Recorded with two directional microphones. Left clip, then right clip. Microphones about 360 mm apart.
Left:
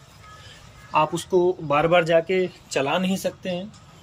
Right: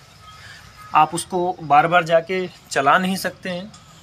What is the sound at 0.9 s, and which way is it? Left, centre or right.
Speech, centre.